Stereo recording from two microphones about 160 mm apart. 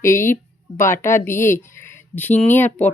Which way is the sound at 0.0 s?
15° left (ahead or behind).